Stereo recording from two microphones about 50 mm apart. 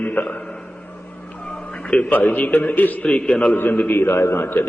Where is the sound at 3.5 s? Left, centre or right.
Left.